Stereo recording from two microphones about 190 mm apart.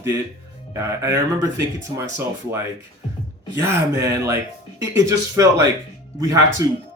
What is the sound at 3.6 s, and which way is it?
Speech, 15° right (ahead or behind).